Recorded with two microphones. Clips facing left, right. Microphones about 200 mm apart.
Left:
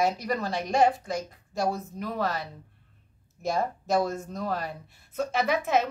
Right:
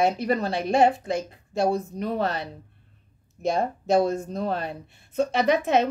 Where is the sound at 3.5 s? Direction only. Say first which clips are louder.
Right 4 dB; 30° right (ahead or behind).